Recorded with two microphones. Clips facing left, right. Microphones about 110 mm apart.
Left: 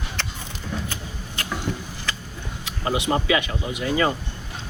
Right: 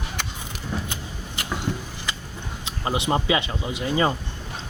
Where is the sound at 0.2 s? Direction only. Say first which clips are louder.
Left 1 dB; 10° right (ahead or behind).